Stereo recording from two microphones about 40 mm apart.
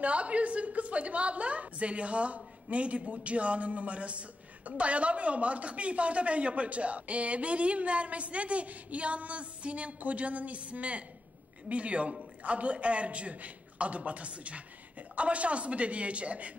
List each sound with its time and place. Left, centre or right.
0.0 s a woman's voice: right